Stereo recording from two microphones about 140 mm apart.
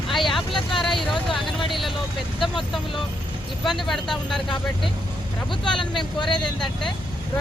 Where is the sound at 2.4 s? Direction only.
Centre (ahead or behind).